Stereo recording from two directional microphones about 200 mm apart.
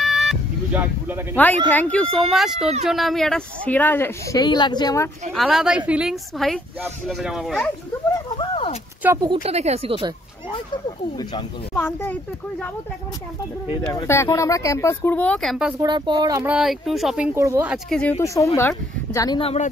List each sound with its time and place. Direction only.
0.0 s vehicle: centre (ahead or behind)
1.3 s speech: 10° left (ahead or behind)
5.3 s speech: centre (ahead or behind)
8.4 s a sound: 25° left (ahead or behind)
9.0 s speech: 15° right (ahead or behind)
9.3 s speech: 30° right (ahead or behind)
11.7 s speech: 10° left (ahead or behind)
13.9 s speech: 15° left (ahead or behind)
15.8 s speech: 20° right (ahead or behind)
16.5 s speech: centre (ahead or behind)
17.8 s speech: 5° left (ahead or behind)
18.2 s speech: 15° left (ahead or behind); by 19.7 s 30° left (ahead or behind)